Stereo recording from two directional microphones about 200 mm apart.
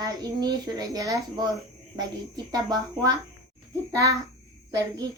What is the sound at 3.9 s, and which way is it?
Speech, 15° right (ahead or behind).